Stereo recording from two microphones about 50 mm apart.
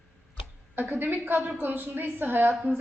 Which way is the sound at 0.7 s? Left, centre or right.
Right.